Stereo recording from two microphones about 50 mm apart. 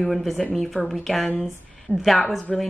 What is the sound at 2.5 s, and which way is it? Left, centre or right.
Speech, centre.